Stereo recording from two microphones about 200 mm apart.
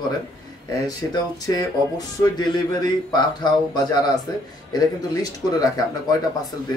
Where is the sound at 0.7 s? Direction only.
20° left (ahead or behind).